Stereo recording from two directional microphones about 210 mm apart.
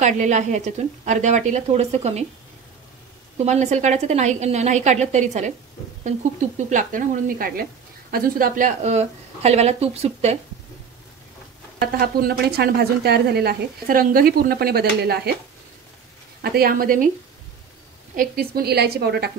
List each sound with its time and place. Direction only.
0.0 s a woman's voice: 35° right (ahead or behind)
3.3 s a woman's voice: 35° right (ahead or behind)
6.7 s a woman's voice: 40° right (ahead or behind)
11.8 s a woman's voice: 45° right (ahead or behind)
16.4 s a woman's voice: 45° right (ahead or behind)
18.1 s a woman's voice: 45° right (ahead or behind)